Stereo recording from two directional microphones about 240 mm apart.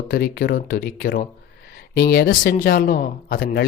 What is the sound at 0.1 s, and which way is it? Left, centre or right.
Speech, left.